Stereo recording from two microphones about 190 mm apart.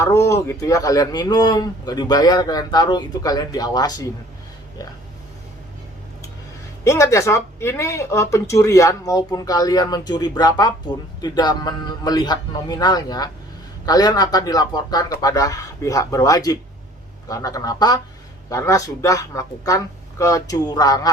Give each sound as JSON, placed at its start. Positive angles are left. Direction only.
{"t": 0.0, "sound": "speech", "side_deg": 15}
{"t": 6.8, "sound": "speech", "side_deg": 15}